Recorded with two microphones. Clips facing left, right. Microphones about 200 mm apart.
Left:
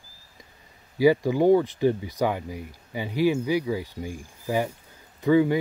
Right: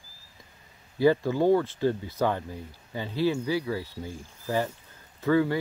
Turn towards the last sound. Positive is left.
turn(degrees=15)  # may be behind; listen again after turning